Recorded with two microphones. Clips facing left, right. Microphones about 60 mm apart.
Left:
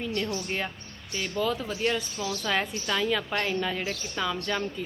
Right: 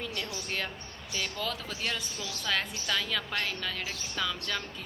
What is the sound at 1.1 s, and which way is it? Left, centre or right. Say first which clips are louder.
Speech: left 6 dB; centre.